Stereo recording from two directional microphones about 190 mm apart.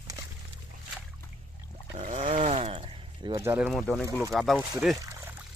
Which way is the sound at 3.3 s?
15° right (ahead or behind).